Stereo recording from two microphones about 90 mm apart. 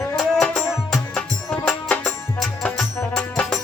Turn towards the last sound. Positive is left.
turn(degrees=5)  # may be behind; listen again after turning